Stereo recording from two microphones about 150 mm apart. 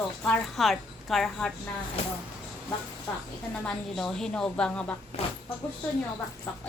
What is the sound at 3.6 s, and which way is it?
A woman's voice, 5° left (ahead or behind).